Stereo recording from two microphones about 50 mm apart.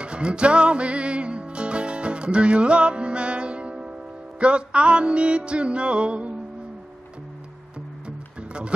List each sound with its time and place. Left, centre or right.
0.0 s music: right
8.4 s music: right